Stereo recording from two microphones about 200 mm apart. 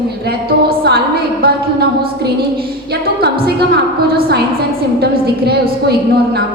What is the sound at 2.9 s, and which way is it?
A woman's voice, 50° right (ahead or behind).